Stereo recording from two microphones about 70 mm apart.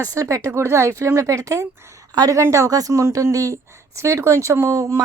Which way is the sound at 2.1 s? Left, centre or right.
Right.